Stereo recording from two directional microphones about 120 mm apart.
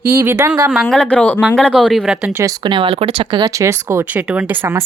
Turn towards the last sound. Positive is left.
turn(degrees=-20)  # may be behind; listen again after turning